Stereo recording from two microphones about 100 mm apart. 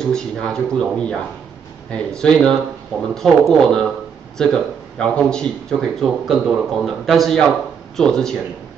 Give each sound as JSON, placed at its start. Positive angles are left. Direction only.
{"t": 0.0, "sound": "speech", "side_deg": 5}